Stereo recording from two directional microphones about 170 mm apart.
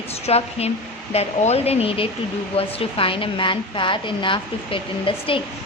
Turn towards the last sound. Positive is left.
turn(degrees=30)  # may be behind; listen again after turning